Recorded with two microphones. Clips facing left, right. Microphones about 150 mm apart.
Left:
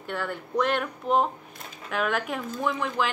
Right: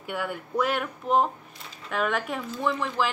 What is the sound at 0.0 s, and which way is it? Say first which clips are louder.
A woman's voice: even; 10° right (ahead or behind).